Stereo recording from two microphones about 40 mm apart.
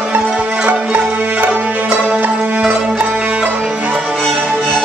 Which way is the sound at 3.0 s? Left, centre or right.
Right.